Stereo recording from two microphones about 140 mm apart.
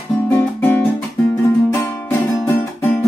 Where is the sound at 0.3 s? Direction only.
15° left (ahead or behind).